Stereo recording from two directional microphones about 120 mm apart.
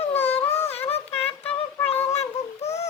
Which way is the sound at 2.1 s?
65° left (ahead or behind).